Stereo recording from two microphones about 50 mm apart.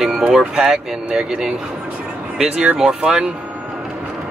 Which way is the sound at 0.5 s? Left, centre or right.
Centre.